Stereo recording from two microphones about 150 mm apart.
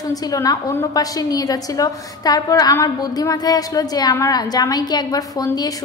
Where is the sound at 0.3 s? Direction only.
25° left (ahead or behind).